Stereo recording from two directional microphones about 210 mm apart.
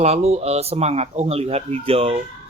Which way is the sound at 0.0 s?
30° right (ahead or behind).